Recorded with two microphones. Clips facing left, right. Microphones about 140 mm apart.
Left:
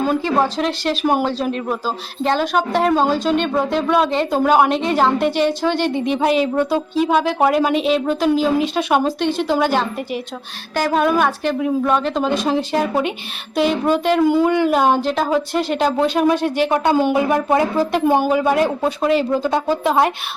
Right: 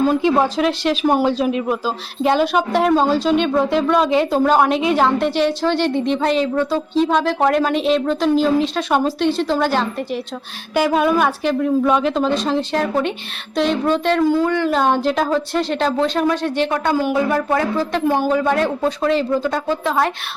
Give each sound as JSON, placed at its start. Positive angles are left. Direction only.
{"t": 0.3, "sound": "a woman's voice", "side_deg": 0}
{"t": 10.8, "sound": "a woman's voice", "side_deg": -5}
{"t": 16.7, "sound": "a woman's voice", "side_deg": 25}
{"t": 19.5, "sound": "a woman's voice", "side_deg": 20}